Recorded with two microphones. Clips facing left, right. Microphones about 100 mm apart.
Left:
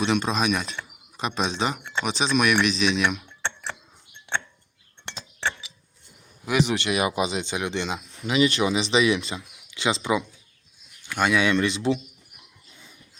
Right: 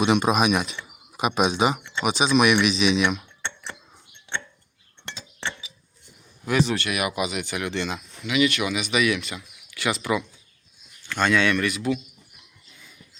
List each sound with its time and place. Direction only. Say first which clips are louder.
0.0 s speech: right 4 dB; 10° right (ahead or behind)
6.4 s speech: even; 15° left (ahead or behind)
8.2 s speech: left 1 dB; 35° left (ahead or behind)
12.7 s a sound: even; 30° left (ahead or behind)